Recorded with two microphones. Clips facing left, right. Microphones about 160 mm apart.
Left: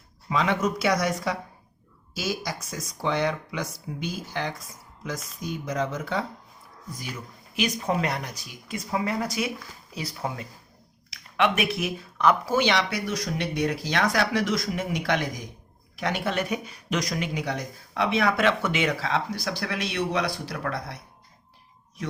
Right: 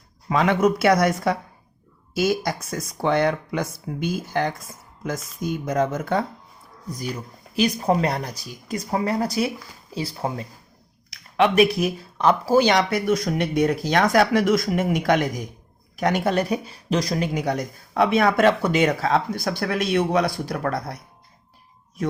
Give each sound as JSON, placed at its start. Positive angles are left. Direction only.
{"t": 0.3, "sound": "speech", "side_deg": -55}
{"t": 7.5, "sound": "speech", "side_deg": -35}
{"t": 17.3, "sound": "speech", "side_deg": -45}